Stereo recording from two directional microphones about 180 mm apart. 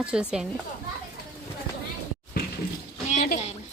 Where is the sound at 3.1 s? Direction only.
45° left (ahead or behind).